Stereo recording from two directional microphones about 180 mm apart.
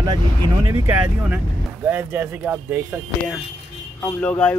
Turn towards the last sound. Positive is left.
turn(degrees=5)  # may be behind; listen again after turning